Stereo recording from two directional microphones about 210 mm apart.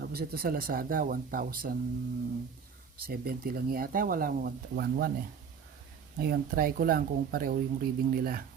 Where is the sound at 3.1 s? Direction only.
45° right (ahead or behind).